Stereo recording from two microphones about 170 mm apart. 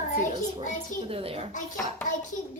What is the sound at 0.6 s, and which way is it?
Speech, 50° left (ahead or behind).